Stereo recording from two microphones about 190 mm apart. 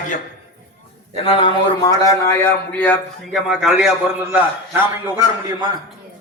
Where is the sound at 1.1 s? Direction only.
30° left (ahead or behind); by 3.0 s 10° left (ahead or behind).